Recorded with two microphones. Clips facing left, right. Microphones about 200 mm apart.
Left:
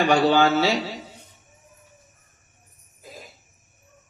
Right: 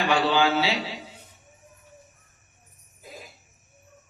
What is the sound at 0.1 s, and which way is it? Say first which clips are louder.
Speech: left 2 dB; 45° left (ahead or behind).